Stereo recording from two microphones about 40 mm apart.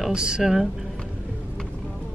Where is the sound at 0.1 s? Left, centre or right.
Right.